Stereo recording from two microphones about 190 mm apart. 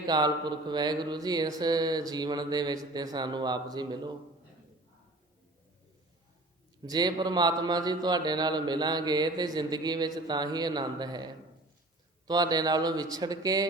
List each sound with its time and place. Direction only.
0.1 s a man's voice: 20° right (ahead or behind)
6.8 s a man's voice: 20° right (ahead or behind)
12.3 s a man's voice: 20° right (ahead or behind)